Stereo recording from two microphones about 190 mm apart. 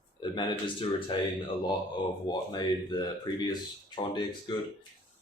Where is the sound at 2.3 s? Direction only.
20° left (ahead or behind).